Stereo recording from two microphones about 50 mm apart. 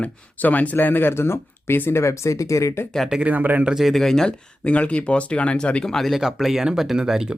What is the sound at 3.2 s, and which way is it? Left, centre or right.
Speech, right.